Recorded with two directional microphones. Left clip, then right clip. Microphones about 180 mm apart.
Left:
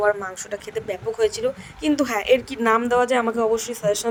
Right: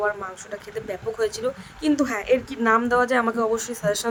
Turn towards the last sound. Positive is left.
turn(degrees=10)  # may be behind; listen again after turning